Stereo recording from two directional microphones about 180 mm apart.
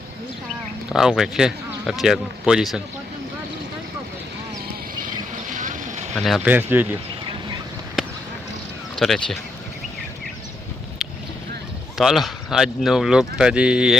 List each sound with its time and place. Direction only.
0.9 s speech: centre (ahead or behind)
5.5 s vehicle: 45° right (ahead or behind)
6.1 s speech: centre (ahead or behind)
6.5 s speech: 10° right (ahead or behind)
9.0 s speech: centre (ahead or behind)
11.9 s speech: centre (ahead or behind)